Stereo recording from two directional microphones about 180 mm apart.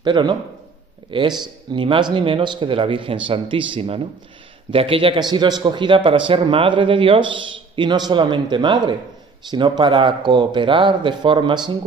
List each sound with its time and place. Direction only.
0.0 s a man's voice: 25° right (ahead or behind)